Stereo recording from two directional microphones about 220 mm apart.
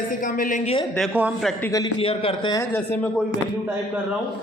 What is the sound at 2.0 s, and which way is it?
Speech, 25° left (ahead or behind).